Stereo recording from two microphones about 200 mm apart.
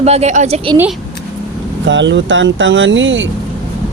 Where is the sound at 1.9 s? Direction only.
65° right (ahead or behind).